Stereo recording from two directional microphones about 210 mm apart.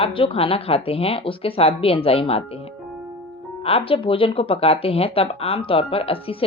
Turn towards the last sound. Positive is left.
turn(degrees=25)  # may be behind; listen again after turning